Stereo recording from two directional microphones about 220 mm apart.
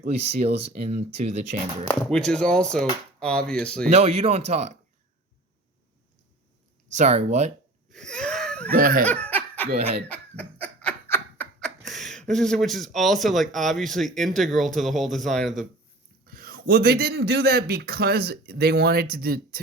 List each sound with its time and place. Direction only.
0.1 s speech: 30° right (ahead or behind)
1.9 s speech: 5° left (ahead or behind)
3.8 s speech: 30° right (ahead or behind)
6.9 s speech: 30° right (ahead or behind)
7.9 s wheeze: 5° left (ahead or behind)
8.7 s speech: 40° right (ahead or behind)
9.2 s laughter: 10° left (ahead or behind)
9.7 s speech: 30° right (ahead or behind)
10.1 s a sound: 5° left (ahead or behind)
16.2 s a man's voice: 40° right (ahead or behind)